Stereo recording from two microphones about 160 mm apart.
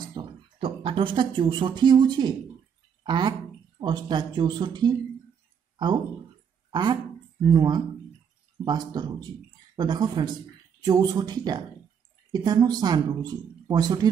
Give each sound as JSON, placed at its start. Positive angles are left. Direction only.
{"t": 0.1, "sound": "a woman's voice", "side_deg": -30}
{"t": 6.7, "sound": "a woman's voice", "side_deg": -25}